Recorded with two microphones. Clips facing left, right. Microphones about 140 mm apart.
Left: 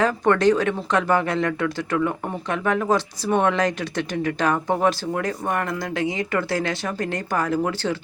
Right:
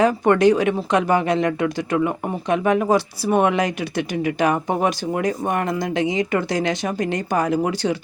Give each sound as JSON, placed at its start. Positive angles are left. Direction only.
{"t": 0.0, "sound": "speech", "side_deg": -15}